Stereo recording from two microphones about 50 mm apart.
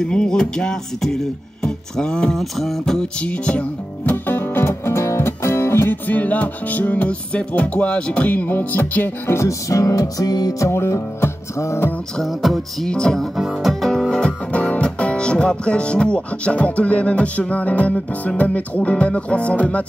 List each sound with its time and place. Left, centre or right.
0.0 s music: centre
1.0 s speech: centre
2.6 s music: centre
3.3 s speech: left
4.1 s music: left
5.9 s music: left
9.3 s speech: left
10.9 s music: left
12.2 s music: centre
12.8 s music: centre
13.4 s music: centre
13.7 s music: centre
14.5 s speech: left
18.4 s music: left